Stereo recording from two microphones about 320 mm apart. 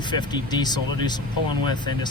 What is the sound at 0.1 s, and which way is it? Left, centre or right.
Speech, centre.